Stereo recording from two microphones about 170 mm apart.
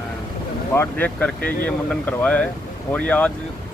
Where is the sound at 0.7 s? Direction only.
10° left (ahead or behind).